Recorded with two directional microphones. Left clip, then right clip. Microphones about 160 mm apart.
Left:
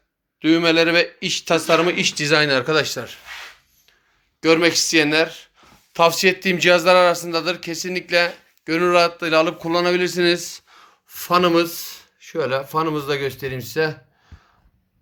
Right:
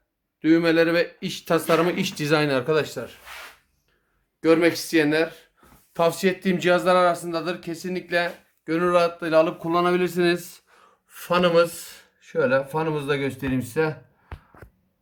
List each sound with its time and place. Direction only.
0.4 s speech: 10° right (ahead or behind)
2.7 s speech: centre (ahead or behind)
4.4 s speech: 5° right (ahead or behind)
11.1 s speech: 15° left (ahead or behind)
13.4 s speech: 40° left (ahead or behind)